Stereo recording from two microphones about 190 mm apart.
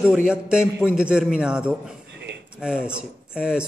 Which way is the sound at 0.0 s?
5° right (ahead or behind).